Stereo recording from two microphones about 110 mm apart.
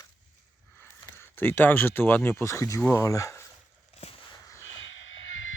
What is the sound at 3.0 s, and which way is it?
Speech, 30° left (ahead or behind).